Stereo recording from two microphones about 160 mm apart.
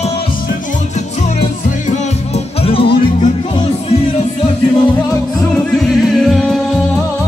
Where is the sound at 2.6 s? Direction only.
35° left (ahead or behind).